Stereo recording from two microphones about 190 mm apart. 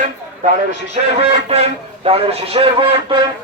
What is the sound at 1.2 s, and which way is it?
A man's voice, 35° right (ahead or behind).